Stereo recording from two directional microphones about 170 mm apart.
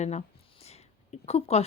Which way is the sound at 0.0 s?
40° left (ahead or behind).